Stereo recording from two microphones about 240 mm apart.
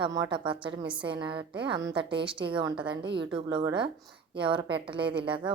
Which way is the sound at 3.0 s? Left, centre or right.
Right.